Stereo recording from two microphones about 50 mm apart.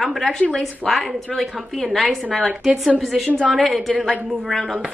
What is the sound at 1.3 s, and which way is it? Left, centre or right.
Speech, centre.